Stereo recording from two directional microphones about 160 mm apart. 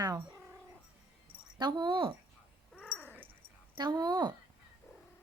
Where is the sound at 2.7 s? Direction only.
5° left (ahead or behind).